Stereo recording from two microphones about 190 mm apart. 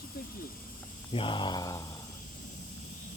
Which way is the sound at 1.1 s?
25° left (ahead or behind).